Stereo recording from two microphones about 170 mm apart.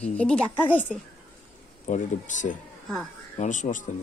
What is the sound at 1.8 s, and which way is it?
Speech, 45° left (ahead or behind).